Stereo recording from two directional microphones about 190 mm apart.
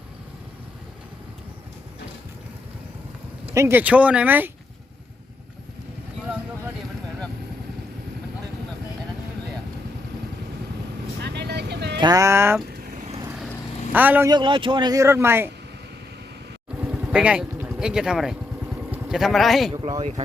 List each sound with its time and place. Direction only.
3.5 s speech: 15° right (ahead or behind)
11.2 s vehicle: 60° right (ahead or behind)
11.9 s speech: 20° right (ahead or behind)
13.9 s speech: 10° right (ahead or behind)
14.3 s speech: 25° right (ahead or behind)
16.8 s vehicle: 5° right (ahead or behind)
18.9 s speech: centre (ahead or behind)
19.7 s speech: 25° right (ahead or behind)